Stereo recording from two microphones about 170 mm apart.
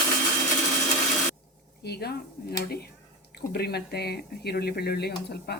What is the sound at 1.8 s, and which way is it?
Speech, 70° left (ahead or behind).